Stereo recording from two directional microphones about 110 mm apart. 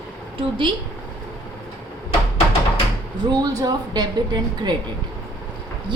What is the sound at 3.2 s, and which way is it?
A woman's voice, 35° right (ahead or behind).